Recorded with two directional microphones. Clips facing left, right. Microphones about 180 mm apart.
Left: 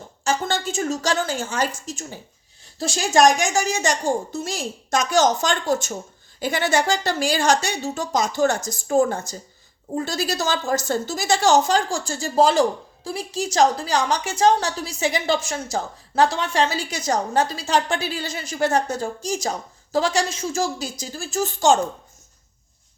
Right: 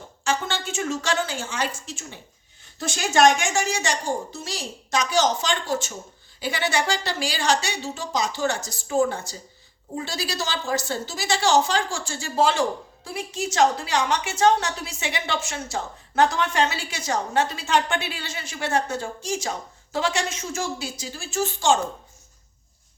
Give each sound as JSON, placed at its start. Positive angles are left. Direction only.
{"t": 0.3, "sound": "a woman's voice", "side_deg": 40}